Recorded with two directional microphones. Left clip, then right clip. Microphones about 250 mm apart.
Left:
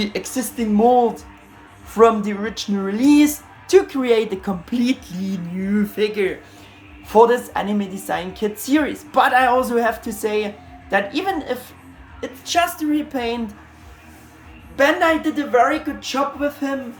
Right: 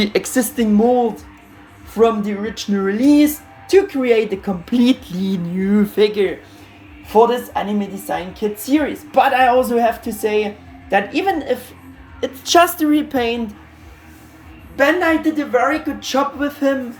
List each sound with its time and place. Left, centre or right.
0.0 s a woman's voice: centre
1.9 s speech: centre
7.1 s speech: left
8.3 s speech: centre
9.1 s speech: left
9.6 s speech: centre
10.2 s speech: left
10.8 s speech: centre
12.2 s a woman's voice: centre
14.8 s speech: centre